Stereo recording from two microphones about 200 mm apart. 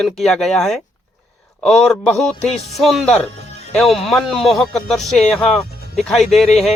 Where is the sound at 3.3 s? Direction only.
35° left (ahead or behind).